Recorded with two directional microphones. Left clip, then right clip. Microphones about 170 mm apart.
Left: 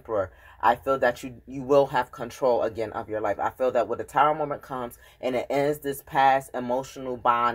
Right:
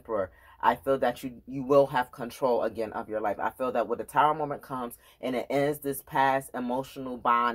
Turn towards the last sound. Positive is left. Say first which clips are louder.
# left 2 dB
turn(degrees=-20)  # may be behind; listen again after turning